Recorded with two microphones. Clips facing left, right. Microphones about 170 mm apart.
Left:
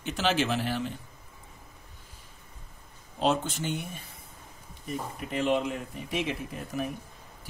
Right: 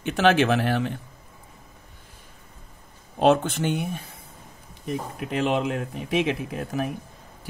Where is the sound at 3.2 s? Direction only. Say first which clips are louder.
Right 8 dB; 60° right (ahead or behind).